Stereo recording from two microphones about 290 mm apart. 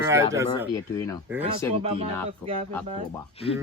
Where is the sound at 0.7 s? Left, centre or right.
Centre.